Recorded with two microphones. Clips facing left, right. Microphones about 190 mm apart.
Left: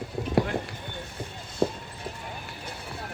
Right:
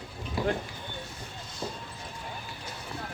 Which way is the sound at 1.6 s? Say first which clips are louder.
Left 11 dB; 60° left (ahead or behind).